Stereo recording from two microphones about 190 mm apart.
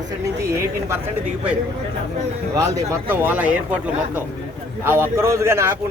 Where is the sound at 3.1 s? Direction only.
10° right (ahead or behind).